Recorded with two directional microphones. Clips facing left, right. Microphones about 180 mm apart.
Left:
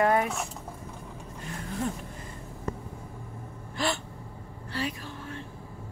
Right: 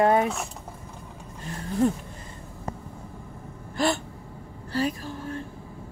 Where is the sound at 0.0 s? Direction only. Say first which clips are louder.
Right 4 dB; 25° right (ahead or behind).